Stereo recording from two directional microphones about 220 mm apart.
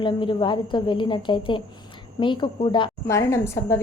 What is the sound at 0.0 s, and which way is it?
A woman's voice, 20° left (ahead or behind).